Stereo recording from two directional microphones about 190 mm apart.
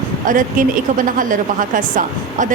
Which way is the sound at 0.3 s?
45° right (ahead or behind).